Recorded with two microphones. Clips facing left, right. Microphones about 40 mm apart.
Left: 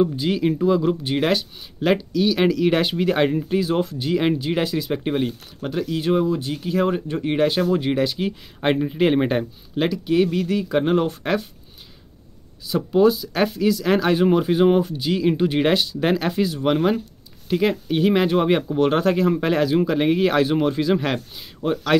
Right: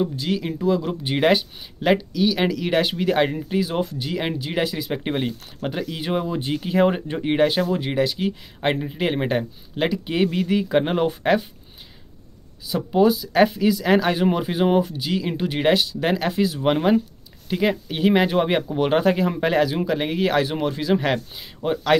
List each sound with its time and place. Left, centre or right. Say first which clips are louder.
0.0 s speech: left 4 dB; centre
1.0 s speech: right 2 dB; centre
5.0 s speech: left 2 dB; centre
7.2 s speech: even; centre
7.7 s speech: left 2 dB; centre
10.0 s speech: left 2 dB; right
12.6 s speech: left 1 dB; centre